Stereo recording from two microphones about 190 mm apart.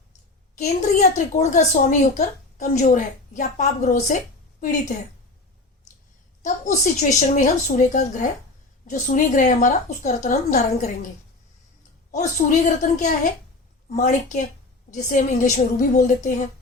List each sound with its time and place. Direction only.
0.5 s a woman's voice: 40° left (ahead or behind)
6.4 s a woman's voice: 40° left (ahead or behind)
12.1 s a woman's voice: 40° left (ahead or behind)